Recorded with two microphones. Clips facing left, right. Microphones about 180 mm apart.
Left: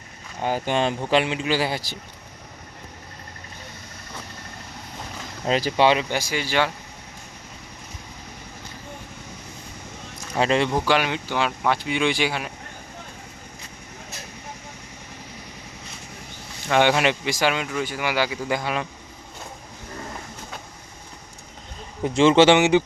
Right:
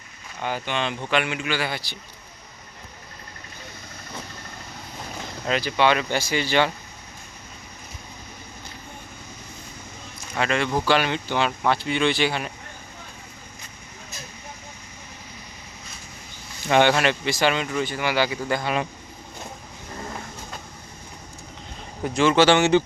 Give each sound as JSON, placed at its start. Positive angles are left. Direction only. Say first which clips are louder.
{"t": 0.4, "sound": "speech", "louder": "left 4 dB", "side_deg": 40}
{"t": 5.5, "sound": "speech", "louder": "left 2 dB", "side_deg": 35}
{"t": 6.0, "sound": "speech", "louder": "right 1 dB", "side_deg": 10}
{"t": 10.3, "sound": "speech", "louder": "left 4 dB", "side_deg": 30}
{"t": 10.8, "sound": "speech", "louder": "even", "side_deg": 10}
{"t": 16.8, "sound": "speech", "louder": "even", "side_deg": 15}
{"t": 22.0, "sound": "speech", "louder": "left 3 dB", "side_deg": 25}